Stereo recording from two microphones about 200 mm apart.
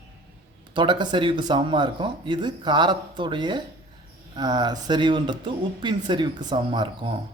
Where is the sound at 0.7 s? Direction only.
25° right (ahead or behind).